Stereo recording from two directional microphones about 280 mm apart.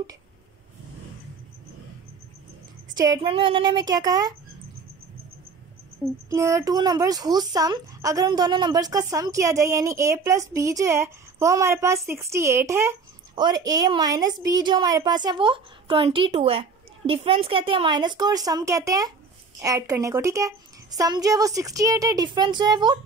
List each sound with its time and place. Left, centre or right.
2.9 s a woman's voice: centre
6.3 s a woman's voice: centre